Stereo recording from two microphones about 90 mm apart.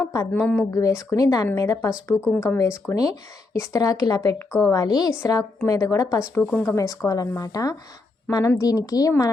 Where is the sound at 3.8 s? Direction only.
45° left (ahead or behind).